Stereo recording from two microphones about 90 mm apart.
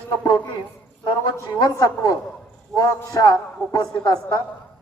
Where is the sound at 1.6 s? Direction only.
45° left (ahead or behind).